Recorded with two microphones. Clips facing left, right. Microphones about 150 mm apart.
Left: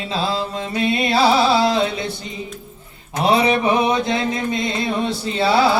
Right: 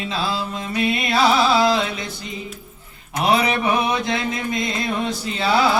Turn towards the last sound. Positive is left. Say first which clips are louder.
# left 3 dB
turn(degrees=30)  # may be behind; listen again after turning